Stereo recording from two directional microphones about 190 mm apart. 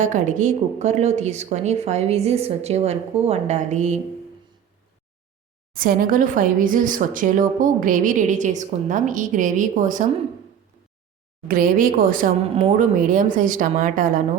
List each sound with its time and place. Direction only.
0.0 s speech: 40° right (ahead or behind)
5.7 s speech: 50° right (ahead or behind)
11.4 s speech: 50° right (ahead or behind)